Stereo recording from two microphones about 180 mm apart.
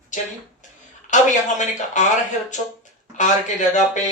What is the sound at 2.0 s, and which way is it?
Speech, 45° left (ahead or behind).